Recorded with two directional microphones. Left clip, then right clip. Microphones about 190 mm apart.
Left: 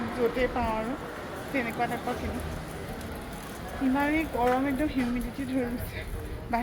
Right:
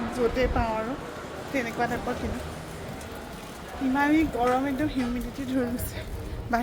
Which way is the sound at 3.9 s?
15° right (ahead or behind).